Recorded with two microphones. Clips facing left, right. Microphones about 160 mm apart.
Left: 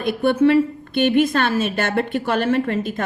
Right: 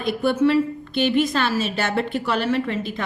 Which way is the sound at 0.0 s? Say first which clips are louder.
Left 3 dB; 55° left (ahead or behind).